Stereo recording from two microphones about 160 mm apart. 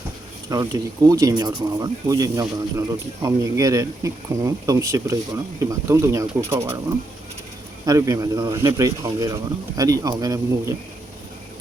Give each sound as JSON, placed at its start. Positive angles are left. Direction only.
{"t": 0.5, "sound": "speech", "side_deg": -25}
{"t": 7.9, "sound": "speech", "side_deg": -20}